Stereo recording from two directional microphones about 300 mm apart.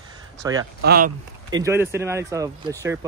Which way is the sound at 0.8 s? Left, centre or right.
Right.